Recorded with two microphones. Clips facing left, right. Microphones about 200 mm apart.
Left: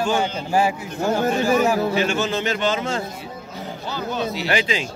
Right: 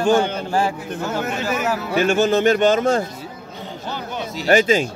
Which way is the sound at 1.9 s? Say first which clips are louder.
Right 5 dB; 50° right (ahead or behind).